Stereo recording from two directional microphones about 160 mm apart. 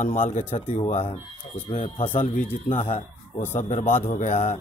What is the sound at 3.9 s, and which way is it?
Speech, 50° left (ahead or behind).